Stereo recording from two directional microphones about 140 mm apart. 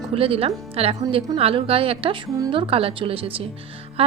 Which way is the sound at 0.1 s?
40° right (ahead or behind).